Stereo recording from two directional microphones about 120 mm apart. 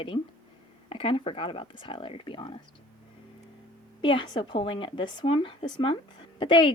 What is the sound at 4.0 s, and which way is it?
A woman's voice, 40° left (ahead or behind).